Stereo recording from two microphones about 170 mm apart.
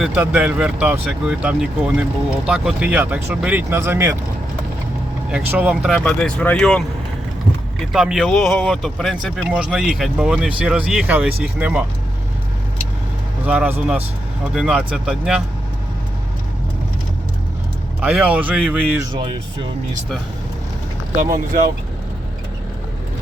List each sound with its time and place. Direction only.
0.0 s speech: 5° right (ahead or behind)
5.3 s speech: 10° right (ahead or behind)
7.9 s speech: 5° right (ahead or behind)
13.4 s speech: 10° right (ahead or behind)
18.0 s speech: 10° right (ahead or behind)
21.2 s speech: 55° right (ahead or behind)